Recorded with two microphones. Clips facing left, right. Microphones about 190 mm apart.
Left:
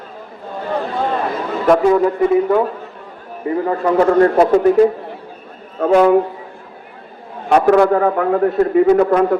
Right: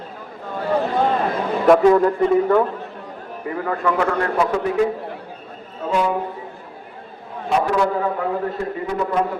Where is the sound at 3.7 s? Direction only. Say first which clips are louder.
Left 6 dB; 30° left (ahead or behind).